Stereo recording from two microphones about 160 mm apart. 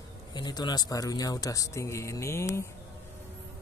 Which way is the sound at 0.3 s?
25° left (ahead or behind).